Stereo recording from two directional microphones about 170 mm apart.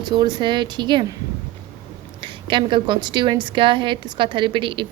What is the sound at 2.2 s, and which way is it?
A woman's voice, 30° right (ahead or behind).